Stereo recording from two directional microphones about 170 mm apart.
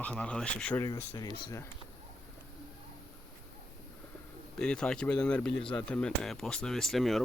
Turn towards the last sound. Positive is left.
turn(degrees=0)  # may be behind; listen again after turning